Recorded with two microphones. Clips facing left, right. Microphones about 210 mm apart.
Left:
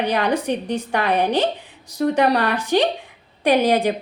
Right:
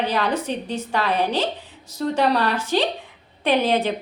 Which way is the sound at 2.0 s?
60° left (ahead or behind).